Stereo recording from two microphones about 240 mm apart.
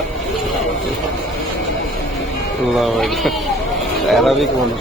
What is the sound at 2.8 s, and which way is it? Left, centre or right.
Speech, centre.